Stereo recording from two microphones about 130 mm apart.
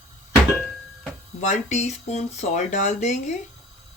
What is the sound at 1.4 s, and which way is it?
Speech, 70° left (ahead or behind).